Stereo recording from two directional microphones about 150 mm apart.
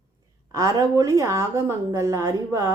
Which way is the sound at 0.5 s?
20° right (ahead or behind).